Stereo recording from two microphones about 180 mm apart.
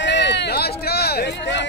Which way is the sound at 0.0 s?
80° left.